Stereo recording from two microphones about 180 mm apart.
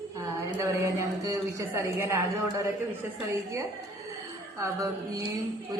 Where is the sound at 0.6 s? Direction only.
15° right (ahead or behind).